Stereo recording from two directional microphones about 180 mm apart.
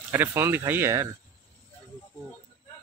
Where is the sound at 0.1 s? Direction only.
10° right (ahead or behind).